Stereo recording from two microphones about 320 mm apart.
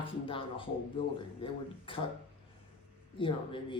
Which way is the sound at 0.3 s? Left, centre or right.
Centre.